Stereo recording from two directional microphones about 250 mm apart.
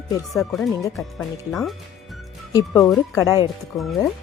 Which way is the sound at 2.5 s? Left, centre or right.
Centre.